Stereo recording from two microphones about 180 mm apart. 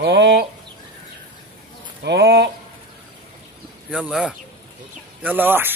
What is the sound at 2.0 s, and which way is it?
Speech, 65° right (ahead or behind).